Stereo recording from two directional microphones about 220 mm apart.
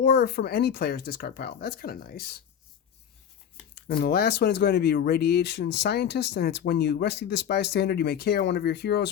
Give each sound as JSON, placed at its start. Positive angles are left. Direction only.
{"t": 0.0, "sound": "speech", "side_deg": 45}
{"t": 3.8, "sound": "speech", "side_deg": 45}